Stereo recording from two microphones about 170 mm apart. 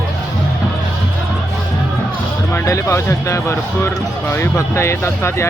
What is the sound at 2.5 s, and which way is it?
Speech, 15° left (ahead or behind).